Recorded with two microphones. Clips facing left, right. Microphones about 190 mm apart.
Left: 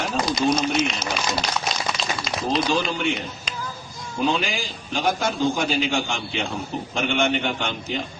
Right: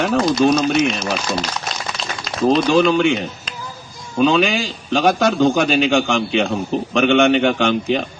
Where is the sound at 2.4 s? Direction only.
75° right (ahead or behind).